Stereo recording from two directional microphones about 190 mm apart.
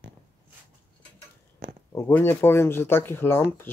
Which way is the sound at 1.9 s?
15° left (ahead or behind).